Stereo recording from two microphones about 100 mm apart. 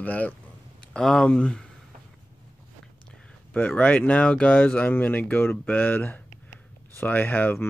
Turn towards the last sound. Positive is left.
turn(degrees=20)  # may be behind; listen again after turning